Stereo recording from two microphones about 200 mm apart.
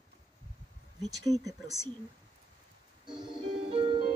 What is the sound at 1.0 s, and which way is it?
Speech, 15° right (ahead or behind).